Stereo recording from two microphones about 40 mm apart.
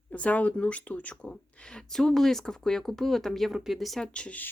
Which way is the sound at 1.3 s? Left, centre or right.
Left.